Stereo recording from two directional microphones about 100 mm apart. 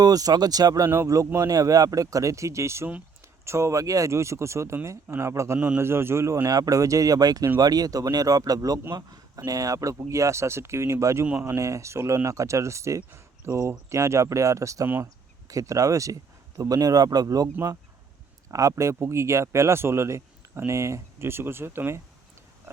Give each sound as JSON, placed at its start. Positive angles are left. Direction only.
{"t": 0.0, "sound": "speech", "side_deg": -40}
{"t": 5.5, "sound": "a man's voice", "side_deg": -15}
{"t": 5.8, "sound": "speech", "side_deg": -25}